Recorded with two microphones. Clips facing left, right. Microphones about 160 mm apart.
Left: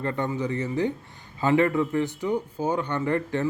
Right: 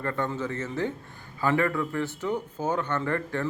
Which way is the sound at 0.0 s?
20° left (ahead or behind).